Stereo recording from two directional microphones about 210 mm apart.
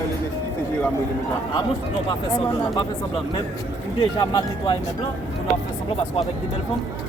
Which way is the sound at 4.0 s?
25° left (ahead or behind).